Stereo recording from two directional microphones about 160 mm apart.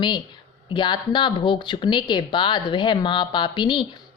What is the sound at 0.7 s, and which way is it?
A woman's voice, 30° left (ahead or behind).